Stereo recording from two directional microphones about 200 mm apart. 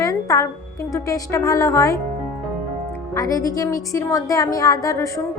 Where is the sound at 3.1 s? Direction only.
15° left (ahead or behind).